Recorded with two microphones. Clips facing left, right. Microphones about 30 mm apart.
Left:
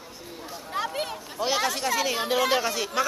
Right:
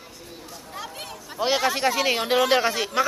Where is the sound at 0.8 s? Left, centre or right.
Centre.